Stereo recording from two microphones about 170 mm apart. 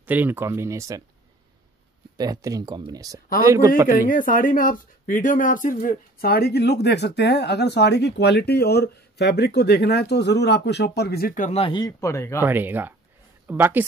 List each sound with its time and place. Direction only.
0.0 s speech: 10° right (ahead or behind)
2.1 s speech: 20° right (ahead or behind)
4.1 s speech: 55° left (ahead or behind)
11.5 s speech: 30° left (ahead or behind)
12.4 s speech: 10° right (ahead or behind)